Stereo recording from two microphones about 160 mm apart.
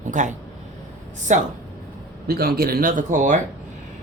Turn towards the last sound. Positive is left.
turn(degrees=-55)  # may be behind; listen again after turning